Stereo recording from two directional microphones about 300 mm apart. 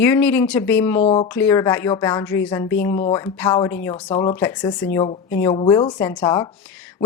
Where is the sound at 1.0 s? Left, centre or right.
Centre.